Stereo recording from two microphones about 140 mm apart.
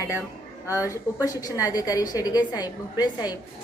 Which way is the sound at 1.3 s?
25° left (ahead or behind).